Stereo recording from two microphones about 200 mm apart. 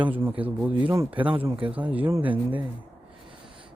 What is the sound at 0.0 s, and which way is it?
Speech, 10° right (ahead or behind).